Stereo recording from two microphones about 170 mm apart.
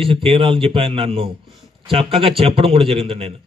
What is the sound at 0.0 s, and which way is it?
Speech, 35° right (ahead or behind).